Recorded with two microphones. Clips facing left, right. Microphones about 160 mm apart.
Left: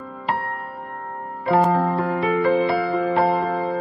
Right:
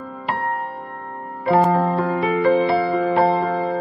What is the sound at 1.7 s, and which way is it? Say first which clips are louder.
Music: right 2 dB; 20° right (ahead or behind).